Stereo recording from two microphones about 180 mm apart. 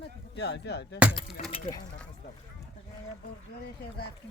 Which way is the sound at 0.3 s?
70° left (ahead or behind).